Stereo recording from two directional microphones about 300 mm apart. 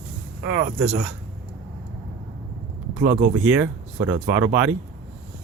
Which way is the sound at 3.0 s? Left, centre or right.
Right.